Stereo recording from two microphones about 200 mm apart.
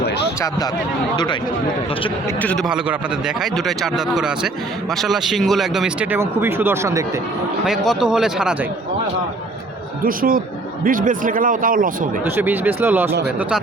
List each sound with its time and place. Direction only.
1.1 s speech: 20° left (ahead or behind)
2.4 s speech: 5° left (ahead or behind)
10.0 s speech: 45° right (ahead or behind)
12.2 s speech: 10° right (ahead or behind)